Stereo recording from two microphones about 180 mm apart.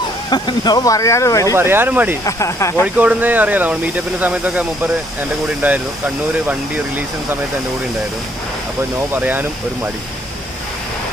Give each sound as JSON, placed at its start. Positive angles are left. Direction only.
{"t": 0.3, "sound": "speech", "side_deg": 25}
{"t": 1.5, "sound": "speech", "side_deg": -15}
{"t": 2.2, "sound": "speech", "side_deg": 15}
{"t": 2.8, "sound": "speech", "side_deg": -10}
{"t": 9.1, "sound": "speech", "side_deg": -10}